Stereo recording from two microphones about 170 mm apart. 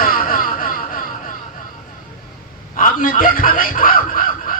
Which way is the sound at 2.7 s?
55° left (ahead or behind).